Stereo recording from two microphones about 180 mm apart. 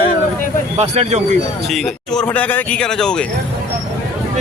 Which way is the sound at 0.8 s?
35° right (ahead or behind).